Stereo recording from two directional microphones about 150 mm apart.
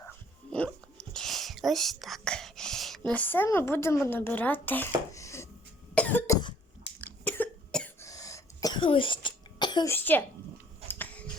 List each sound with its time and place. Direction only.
0.5 s whispering: 5° left (ahead or behind)
3.0 s speech: 10° left (ahead or behind)
5.1 s a sound: 20° left (ahead or behind)
5.9 s cough: 10° left (ahead or behind)
8.0 s cough: 20° left (ahead or behind)
9.9 s speech: 15° left (ahead or behind)
10.8 s a sound: 10° left (ahead or behind)